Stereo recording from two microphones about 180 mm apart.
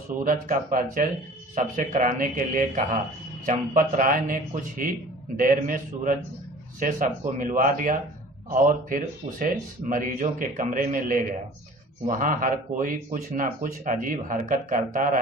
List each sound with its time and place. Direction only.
0.1 s speech: 45° right (ahead or behind)